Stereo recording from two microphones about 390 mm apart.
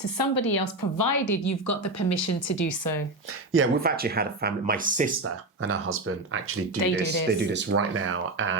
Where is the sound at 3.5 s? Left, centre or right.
Right.